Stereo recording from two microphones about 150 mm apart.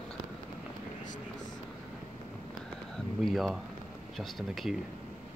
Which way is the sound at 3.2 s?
Centre (ahead or behind).